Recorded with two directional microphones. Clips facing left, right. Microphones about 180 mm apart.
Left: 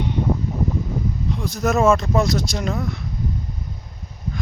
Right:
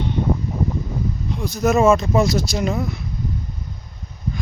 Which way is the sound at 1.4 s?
Centre (ahead or behind).